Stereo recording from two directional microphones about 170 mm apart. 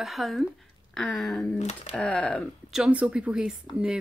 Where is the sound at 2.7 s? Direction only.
5° right (ahead or behind).